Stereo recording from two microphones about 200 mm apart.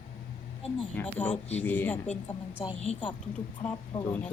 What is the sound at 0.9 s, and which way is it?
Speech, 5° left (ahead or behind).